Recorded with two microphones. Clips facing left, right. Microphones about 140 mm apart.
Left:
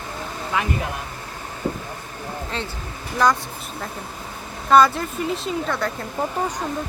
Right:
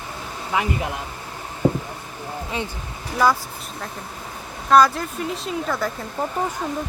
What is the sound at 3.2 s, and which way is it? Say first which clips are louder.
Speech: even; 5° right (ahead or behind).